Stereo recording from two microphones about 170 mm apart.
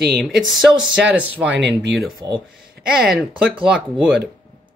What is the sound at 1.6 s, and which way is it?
Speech, 90° right.